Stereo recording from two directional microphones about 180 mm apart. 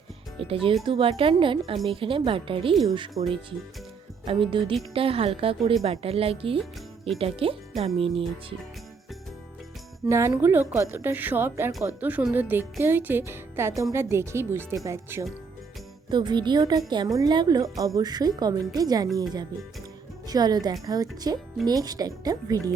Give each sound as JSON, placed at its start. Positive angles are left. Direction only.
{"t": 0.4, "sound": "a woman's voice", "side_deg": -30}
{"t": 4.3, "sound": "a woman's voice", "side_deg": -30}
{"t": 10.1, "sound": "a woman's voice", "side_deg": -15}
{"t": 20.2, "sound": "a woman's voice", "side_deg": -20}